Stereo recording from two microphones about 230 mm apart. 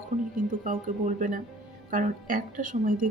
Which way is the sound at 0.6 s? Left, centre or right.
Right.